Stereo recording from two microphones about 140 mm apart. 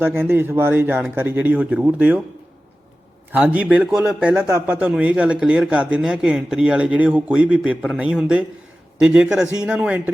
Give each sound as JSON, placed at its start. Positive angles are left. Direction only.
{"t": 0.0, "sound": "a man's voice", "side_deg": -15}
{"t": 3.3, "sound": "a man's voice", "side_deg": -10}